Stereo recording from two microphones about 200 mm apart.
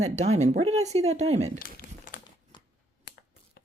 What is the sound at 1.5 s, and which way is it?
Crumpling, 45° left (ahead or behind).